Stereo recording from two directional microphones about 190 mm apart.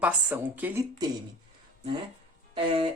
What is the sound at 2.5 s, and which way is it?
Music, 30° right (ahead or behind).